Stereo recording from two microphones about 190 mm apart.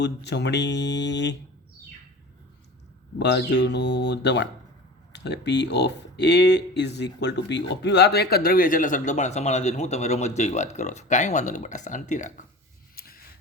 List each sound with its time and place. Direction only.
0.0 s speech: 65° left (ahead or behind)
3.2 s speech: 60° left (ahead or behind); by 12.5 s 40° left (ahead or behind)
13.0 s a sound: 50° left (ahead or behind)